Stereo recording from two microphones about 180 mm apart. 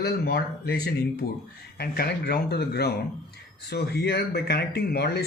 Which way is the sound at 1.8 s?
60° left (ahead or behind).